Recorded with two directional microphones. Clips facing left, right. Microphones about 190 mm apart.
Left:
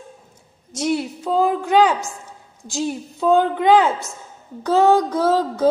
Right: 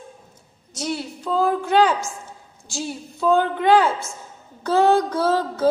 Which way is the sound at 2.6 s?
15° left (ahead or behind).